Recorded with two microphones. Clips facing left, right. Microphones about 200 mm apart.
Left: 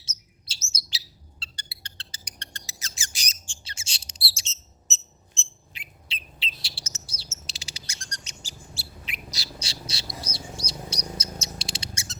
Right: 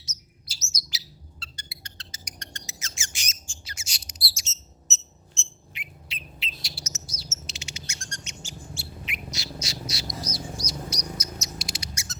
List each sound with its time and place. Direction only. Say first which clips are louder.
0.0 s bird: right 3 dB; 25° left (ahead or behind)